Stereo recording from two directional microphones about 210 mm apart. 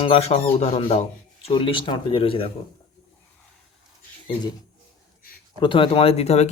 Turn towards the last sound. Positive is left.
turn(degrees=30)  # may be behind; listen again after turning